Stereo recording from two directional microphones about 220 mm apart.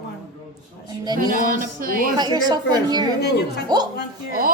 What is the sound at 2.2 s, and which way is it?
A woman's voice, 20° right (ahead or behind).